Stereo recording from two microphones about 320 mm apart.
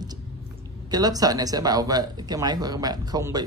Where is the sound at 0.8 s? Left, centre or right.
Centre.